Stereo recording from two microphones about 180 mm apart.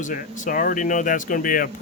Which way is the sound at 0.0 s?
45° left (ahead or behind).